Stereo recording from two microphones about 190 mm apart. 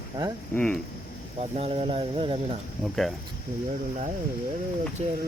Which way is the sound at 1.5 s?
30° right (ahead or behind).